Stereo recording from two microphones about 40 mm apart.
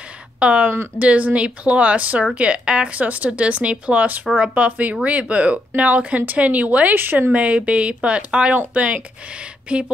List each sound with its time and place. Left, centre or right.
0.4 s speech: right
2.9 s speech: right
6.9 s speech: right
7.3 s speech: right
9.7 s a sound: right